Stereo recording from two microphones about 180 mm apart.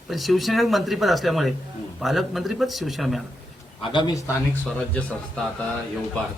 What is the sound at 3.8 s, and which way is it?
Speech, 25° left (ahead or behind).